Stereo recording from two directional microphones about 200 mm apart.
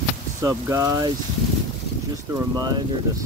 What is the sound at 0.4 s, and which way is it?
Speech, 15° right (ahead or behind).